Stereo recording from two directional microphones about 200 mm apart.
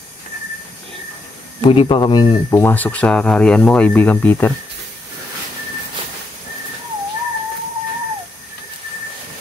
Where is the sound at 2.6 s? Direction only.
10° left (ahead or behind).